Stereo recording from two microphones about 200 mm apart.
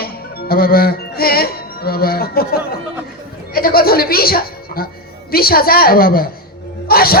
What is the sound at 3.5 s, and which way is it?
Music, 50° left (ahead or behind).